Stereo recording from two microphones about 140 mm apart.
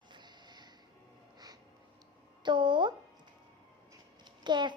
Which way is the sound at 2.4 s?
35° right (ahead or behind).